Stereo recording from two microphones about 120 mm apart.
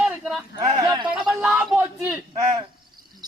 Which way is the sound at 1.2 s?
5° right (ahead or behind).